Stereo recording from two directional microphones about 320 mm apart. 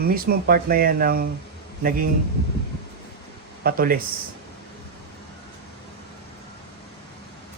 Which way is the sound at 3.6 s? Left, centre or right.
Right.